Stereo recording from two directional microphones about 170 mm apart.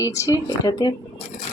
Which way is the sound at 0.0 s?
20° left (ahead or behind).